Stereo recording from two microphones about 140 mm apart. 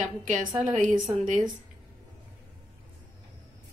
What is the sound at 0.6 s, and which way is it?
Speech, 60° right (ahead or behind).